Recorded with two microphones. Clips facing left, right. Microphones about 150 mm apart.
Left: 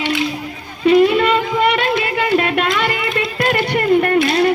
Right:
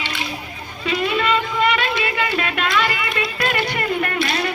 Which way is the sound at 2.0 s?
50° left (ahead or behind).